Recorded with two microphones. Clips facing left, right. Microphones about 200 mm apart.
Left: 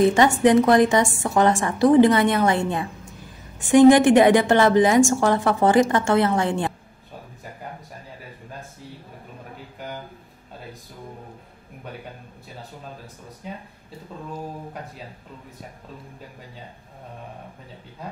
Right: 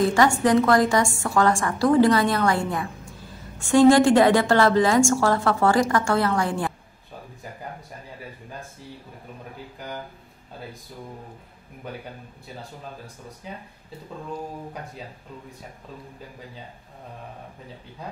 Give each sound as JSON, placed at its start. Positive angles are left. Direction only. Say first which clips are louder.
{"t": 0.0, "sound": "a woman's voice", "louder": "left 3 dB", "side_deg": 20}